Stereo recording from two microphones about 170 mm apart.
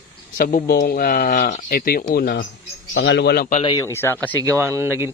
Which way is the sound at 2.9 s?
90° left.